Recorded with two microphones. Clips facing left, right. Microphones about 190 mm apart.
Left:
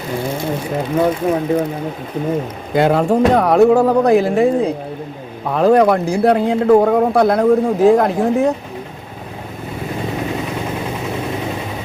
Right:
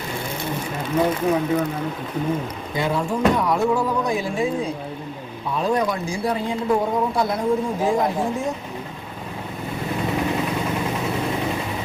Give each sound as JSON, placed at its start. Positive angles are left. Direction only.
{"t": 1.2, "sound": "speech", "side_deg": 60}
{"t": 2.7, "sound": "speech", "side_deg": 70}